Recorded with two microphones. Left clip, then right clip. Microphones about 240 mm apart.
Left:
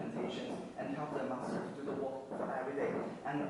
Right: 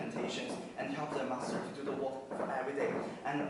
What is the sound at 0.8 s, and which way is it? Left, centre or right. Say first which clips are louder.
A man's voice: right 2 dB; centre.